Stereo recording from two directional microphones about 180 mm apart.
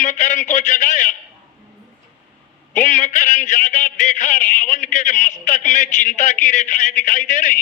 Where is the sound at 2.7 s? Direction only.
45° left (ahead or behind).